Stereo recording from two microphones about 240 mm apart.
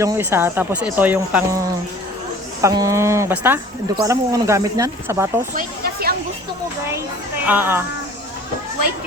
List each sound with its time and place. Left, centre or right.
0.0 s speech: centre
5.5 s a sound: right
7.4 s speech: centre